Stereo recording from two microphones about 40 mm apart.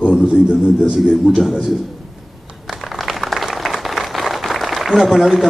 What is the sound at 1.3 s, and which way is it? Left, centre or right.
Speech, right.